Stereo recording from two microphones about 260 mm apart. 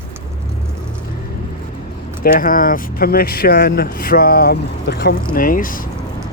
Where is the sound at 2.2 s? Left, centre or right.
Left.